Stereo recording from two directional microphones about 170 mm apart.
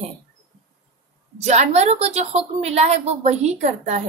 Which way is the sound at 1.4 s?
40° right (ahead or behind).